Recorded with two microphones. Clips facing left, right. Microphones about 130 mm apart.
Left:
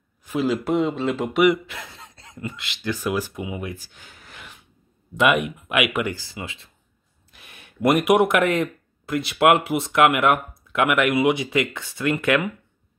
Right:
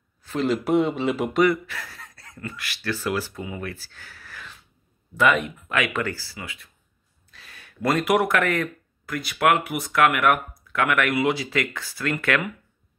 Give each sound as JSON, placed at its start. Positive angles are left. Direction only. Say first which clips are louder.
{"t": 0.2, "sound": "a sound", "louder": "left 2 dB", "side_deg": 10}
{"t": 0.5, "sound": "speech", "louder": "right 1 dB", "side_deg": 0}
{"t": 1.4, "sound": "speech", "louder": "left 3 dB", "side_deg": 20}